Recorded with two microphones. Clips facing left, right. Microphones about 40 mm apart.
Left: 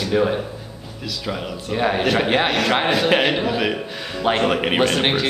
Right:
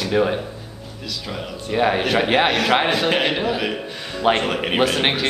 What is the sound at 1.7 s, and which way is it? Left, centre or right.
A man's voice, centre.